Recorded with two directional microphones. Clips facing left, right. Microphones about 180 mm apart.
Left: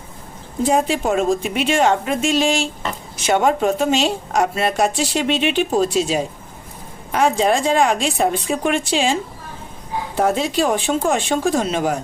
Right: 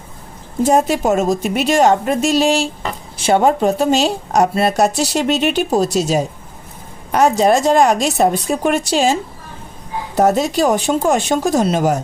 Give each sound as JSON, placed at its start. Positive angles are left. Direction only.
{"t": 0.6, "sound": "a woman's voice", "side_deg": -45}
{"t": 10.2, "sound": "a woman's voice", "side_deg": -40}